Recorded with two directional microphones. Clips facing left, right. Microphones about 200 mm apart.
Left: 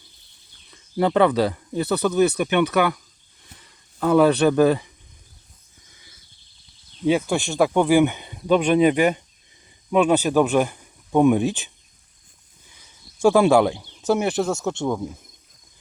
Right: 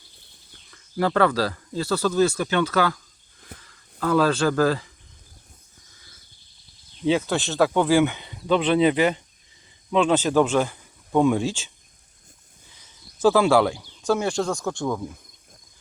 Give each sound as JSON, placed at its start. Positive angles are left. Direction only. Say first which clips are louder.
{"t": 0.7, "sound": "speech", "louder": "left 3 dB", "side_deg": 20}
{"t": 7.1, "sound": "a man's voice", "louder": "left 2 dB", "side_deg": 15}
{"t": 13.2, "sound": "speech", "louder": "left 2 dB", "side_deg": 15}